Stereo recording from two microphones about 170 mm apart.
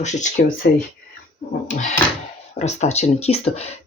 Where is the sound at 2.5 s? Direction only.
40° left (ahead or behind).